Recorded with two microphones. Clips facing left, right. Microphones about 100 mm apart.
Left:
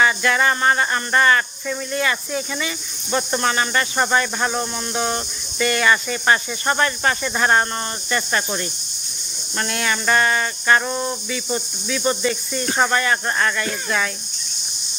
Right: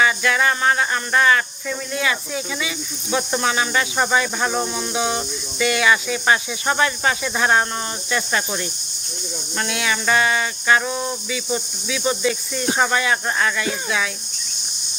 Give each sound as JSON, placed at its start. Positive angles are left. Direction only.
{"t": 0.0, "sound": "speech", "side_deg": 0}